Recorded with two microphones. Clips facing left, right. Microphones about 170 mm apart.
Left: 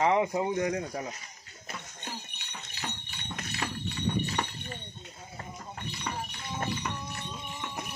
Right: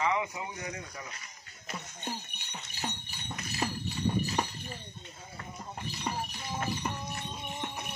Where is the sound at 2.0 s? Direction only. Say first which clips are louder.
Right 5 dB; 45° right (ahead or behind).